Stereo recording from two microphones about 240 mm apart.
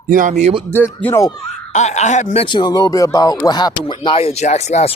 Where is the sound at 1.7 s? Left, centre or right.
Left.